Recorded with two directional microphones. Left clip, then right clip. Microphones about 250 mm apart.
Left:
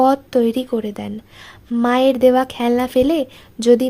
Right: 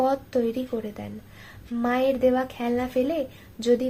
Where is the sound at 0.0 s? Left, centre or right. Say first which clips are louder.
Left 9 dB; left.